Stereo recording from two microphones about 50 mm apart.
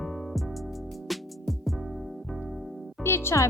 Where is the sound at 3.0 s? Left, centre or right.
Left.